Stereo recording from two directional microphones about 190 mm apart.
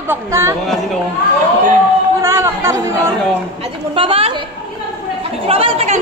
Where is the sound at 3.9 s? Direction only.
30° right (ahead or behind).